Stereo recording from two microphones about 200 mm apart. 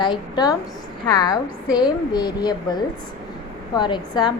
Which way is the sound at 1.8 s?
20° left (ahead or behind).